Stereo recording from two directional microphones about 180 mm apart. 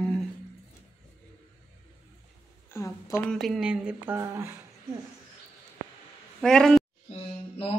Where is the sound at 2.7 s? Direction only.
15° left (ahead or behind).